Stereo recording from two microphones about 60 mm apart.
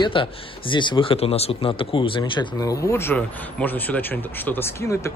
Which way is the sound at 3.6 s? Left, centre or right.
Left.